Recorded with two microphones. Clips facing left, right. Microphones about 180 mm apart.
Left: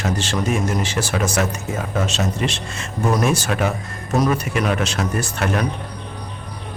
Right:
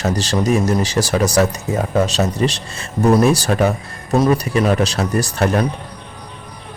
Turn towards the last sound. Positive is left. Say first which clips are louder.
# right 5 dB
turn(degrees=-35)  # may be behind; listen again after turning